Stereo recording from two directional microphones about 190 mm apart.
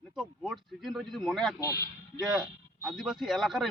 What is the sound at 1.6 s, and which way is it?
Speech, 20° left (ahead or behind).